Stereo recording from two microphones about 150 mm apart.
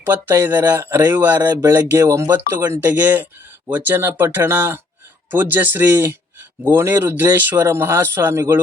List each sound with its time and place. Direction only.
0.0 s speech: 15° right (ahead or behind)